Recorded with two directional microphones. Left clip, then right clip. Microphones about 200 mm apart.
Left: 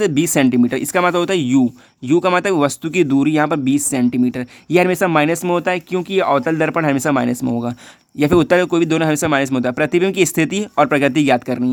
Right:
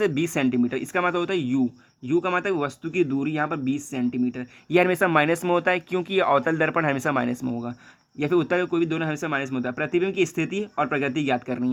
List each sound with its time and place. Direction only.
0.0 s speech: 35° left (ahead or behind)